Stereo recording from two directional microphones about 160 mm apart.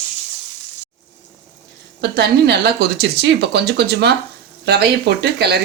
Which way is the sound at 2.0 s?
90° right.